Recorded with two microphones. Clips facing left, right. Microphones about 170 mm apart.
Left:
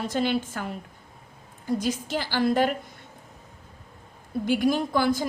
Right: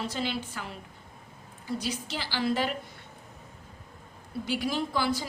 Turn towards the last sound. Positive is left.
turn(degrees=50)  # may be behind; listen again after turning